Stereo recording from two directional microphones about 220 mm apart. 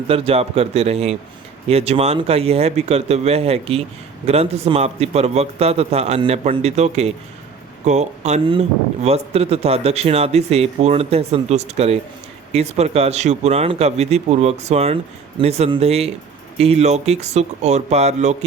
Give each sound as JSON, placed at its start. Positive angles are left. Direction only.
{"t": 0.1, "sound": "speech", "side_deg": -25}